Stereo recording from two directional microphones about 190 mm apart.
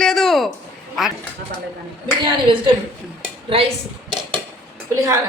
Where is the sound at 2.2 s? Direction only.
25° right (ahead or behind).